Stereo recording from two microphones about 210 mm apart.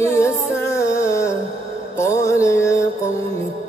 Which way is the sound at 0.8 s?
15° left (ahead or behind).